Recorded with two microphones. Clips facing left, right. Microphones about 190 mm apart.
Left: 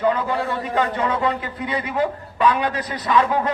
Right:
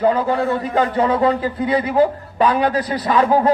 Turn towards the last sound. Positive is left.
turn(degrees=-35)  # may be behind; listen again after turning